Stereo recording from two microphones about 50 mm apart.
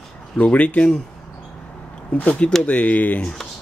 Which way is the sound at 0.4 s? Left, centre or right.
Left.